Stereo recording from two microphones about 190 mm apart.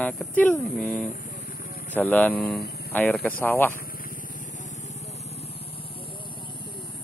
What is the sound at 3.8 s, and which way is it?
Vehicle, 50° left (ahead or behind).